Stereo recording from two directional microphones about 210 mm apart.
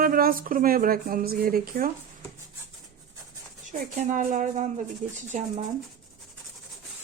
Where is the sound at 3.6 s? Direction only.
40° right (ahead or behind).